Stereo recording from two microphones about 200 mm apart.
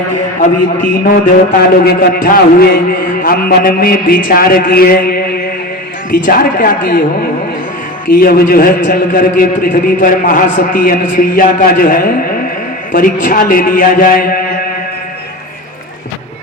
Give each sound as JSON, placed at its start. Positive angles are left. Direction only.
{"t": 0.3, "sound": "a man's voice", "side_deg": 40}
{"t": 8.0, "sound": "a man's voice", "side_deg": 45}